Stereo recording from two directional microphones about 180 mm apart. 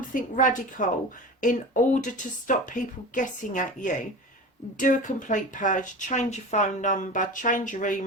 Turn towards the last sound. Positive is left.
turn(degrees=45)  # may be behind; listen again after turning